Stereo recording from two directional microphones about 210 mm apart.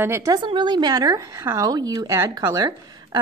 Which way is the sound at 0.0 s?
15° right (ahead or behind).